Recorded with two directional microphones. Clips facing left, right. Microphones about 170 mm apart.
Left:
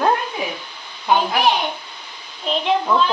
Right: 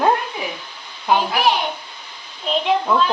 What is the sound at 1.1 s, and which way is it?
Speech, centre (ahead or behind).